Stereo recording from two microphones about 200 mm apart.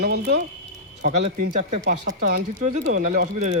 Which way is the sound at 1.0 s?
40° right (ahead or behind).